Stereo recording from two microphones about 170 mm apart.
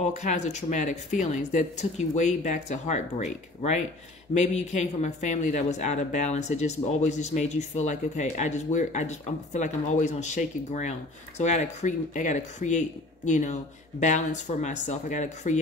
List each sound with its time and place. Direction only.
0.0 s speech: 45° left (ahead or behind)